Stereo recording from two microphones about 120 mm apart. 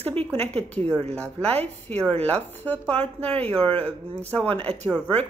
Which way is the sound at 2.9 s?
55° right (ahead or behind).